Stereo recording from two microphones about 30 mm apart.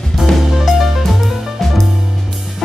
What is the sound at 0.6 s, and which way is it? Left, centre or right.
Music, centre.